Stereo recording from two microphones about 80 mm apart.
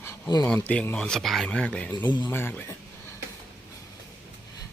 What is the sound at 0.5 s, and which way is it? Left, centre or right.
Speech, centre.